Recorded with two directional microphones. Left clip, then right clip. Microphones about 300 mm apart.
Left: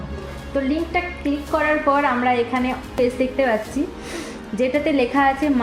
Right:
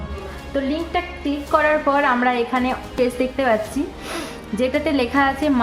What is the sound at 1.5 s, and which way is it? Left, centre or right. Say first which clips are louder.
A woman's voice: right 2 dB; centre.